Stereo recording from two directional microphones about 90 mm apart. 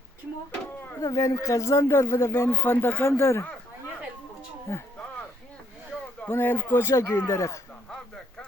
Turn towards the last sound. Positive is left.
turn(degrees=35)  # may be behind; listen again after turning